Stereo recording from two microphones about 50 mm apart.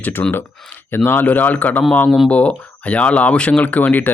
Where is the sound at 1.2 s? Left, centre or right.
Left.